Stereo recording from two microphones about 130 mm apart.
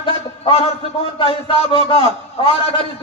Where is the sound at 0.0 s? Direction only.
40° left (ahead or behind).